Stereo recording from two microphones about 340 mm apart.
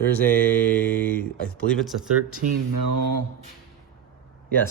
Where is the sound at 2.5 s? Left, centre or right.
Right.